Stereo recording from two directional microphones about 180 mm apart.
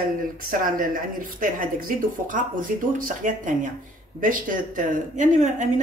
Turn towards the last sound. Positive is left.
turn(degrees=-40)  # may be behind; listen again after turning